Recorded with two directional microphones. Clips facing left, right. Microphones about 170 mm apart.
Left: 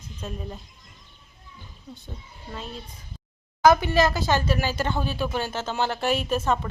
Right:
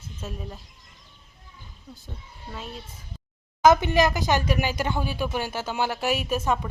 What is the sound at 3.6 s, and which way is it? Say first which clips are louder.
Speech: even; 20° right (ahead or behind).